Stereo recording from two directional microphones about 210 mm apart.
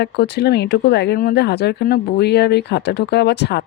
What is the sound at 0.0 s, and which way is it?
Speech, 50° left (ahead or behind).